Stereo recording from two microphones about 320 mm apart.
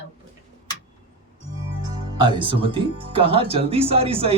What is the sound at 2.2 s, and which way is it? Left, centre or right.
Speech, centre.